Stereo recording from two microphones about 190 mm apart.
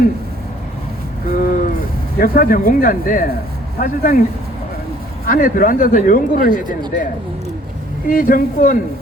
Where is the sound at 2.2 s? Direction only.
50° left (ahead or behind).